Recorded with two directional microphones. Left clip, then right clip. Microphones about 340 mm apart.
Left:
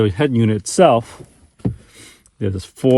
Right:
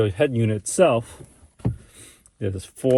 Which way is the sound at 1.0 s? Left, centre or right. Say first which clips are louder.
Left 6 dB; centre.